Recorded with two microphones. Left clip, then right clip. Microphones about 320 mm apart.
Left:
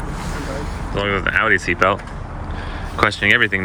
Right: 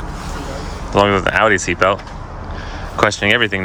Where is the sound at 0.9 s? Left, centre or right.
Centre.